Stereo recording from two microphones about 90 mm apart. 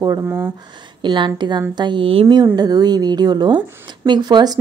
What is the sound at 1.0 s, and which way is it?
Speech, 60° right (ahead or behind).